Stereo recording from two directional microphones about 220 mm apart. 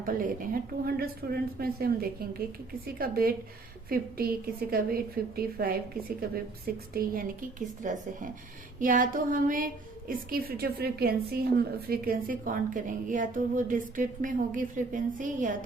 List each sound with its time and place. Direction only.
0.0 s a woman's voice: 40° right (ahead or behind)